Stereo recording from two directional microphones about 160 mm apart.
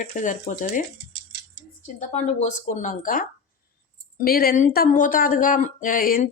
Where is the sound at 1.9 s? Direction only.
45° left (ahead or behind); by 6.3 s 60° left (ahead or behind).